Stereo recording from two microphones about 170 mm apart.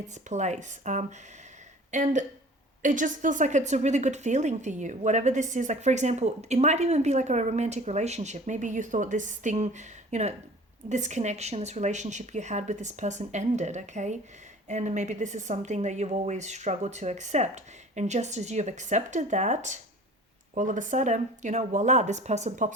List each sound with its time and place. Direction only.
0.1 s a woman's voice: 45° right (ahead or behind)